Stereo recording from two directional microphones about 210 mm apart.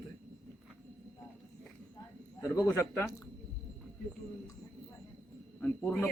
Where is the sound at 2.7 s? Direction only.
10° left (ahead or behind).